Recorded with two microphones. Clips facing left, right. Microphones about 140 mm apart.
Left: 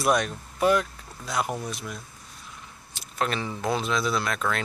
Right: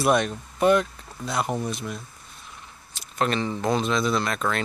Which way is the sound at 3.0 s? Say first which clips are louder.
Right 3 dB; 5° left (ahead or behind).